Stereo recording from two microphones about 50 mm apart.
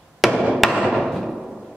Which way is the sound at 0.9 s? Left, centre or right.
Centre.